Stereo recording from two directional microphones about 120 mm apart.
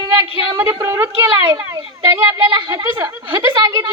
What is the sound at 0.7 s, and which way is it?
A child's voice, 25° right (ahead or behind).